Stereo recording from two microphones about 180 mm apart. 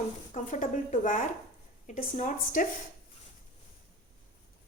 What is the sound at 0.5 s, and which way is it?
A woman's voice, 45° left (ahead or behind).